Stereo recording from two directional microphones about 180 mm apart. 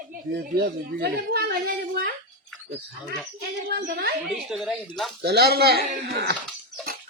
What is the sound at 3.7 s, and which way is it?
Speech, 60° right (ahead or behind).